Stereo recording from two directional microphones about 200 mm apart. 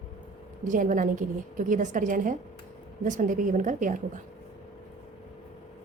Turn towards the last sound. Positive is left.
turn(degrees=-40)  # may be behind; listen again after turning